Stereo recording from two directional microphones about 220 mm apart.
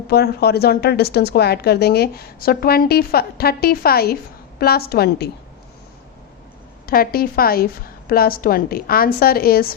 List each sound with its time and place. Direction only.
0.1 s speech: 45° left (ahead or behind)
6.8 s speech: 40° left (ahead or behind)